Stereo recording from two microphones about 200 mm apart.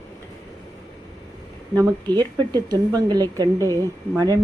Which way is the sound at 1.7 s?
20° right (ahead or behind).